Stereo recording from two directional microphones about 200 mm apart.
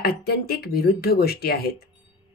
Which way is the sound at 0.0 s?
50° left (ahead or behind).